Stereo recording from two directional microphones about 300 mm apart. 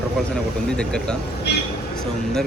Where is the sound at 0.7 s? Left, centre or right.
Centre.